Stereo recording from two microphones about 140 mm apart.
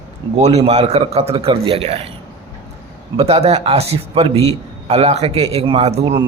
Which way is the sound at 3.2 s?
45° right (ahead or behind).